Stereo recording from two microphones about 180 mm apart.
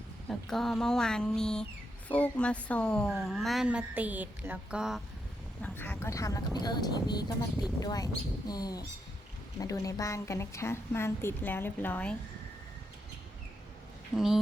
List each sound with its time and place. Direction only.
0.3 s a woman's voice: centre (ahead or behind)
5.6 s a woman's voice: 10° left (ahead or behind)
14.2 s a woman's voice: centre (ahead or behind)